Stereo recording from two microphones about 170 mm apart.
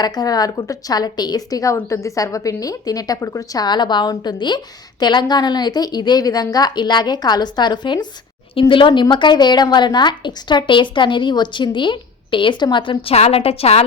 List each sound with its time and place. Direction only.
0.0 s a woman's voice: 25° left (ahead or behind)